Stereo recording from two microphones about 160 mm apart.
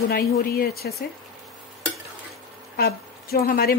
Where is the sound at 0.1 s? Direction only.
75° left (ahead or behind).